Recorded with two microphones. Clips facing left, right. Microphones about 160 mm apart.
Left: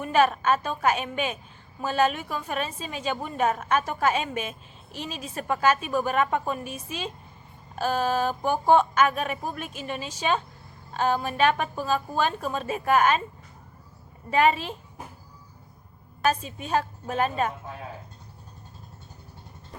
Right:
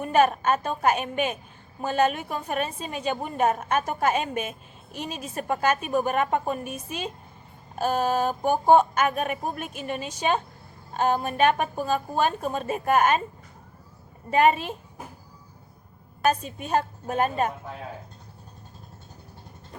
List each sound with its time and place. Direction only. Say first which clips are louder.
0.0 s a woman's voice: right 1 dB; 50° right (ahead or behind)
14.3 s a woman's voice: right 2 dB; 50° right (ahead or behind)
16.2 s a woman's voice: right 1 dB; 50° right (ahead or behind)